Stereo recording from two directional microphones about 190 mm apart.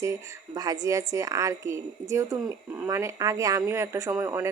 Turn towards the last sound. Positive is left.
turn(degrees=-15)  # may be behind; listen again after turning